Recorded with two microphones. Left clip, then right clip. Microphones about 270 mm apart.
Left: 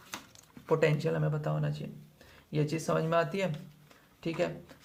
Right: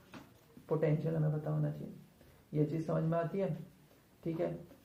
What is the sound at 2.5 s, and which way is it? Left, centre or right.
Speech, left.